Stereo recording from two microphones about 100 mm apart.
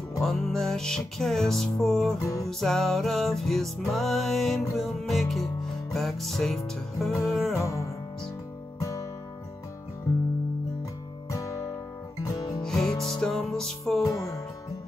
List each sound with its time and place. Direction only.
0.2 s music: 5° left (ahead or behind)
7.5 s music: 30° left (ahead or behind)
11.2 s music: 35° left (ahead or behind)
12.6 s music: 5° left (ahead or behind)
14.0 s music: 35° left (ahead or behind)